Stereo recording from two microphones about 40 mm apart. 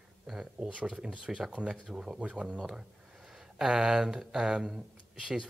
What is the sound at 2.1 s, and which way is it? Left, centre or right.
Speech, right.